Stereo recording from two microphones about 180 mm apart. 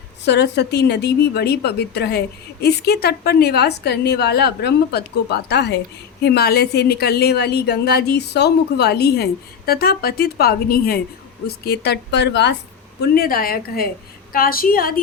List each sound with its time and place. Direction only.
0.3 s a woman's voice: 70° left (ahead or behind)
13.0 s a woman's voice: 55° left (ahead or behind)